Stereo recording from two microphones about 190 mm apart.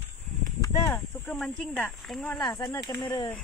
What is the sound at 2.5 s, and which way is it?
Speech, 20° left (ahead or behind).